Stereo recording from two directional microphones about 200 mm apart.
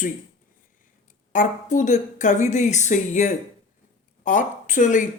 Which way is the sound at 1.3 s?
40° left (ahead or behind).